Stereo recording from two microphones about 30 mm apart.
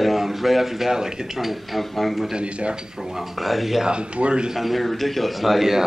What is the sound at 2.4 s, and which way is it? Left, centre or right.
Speech, right.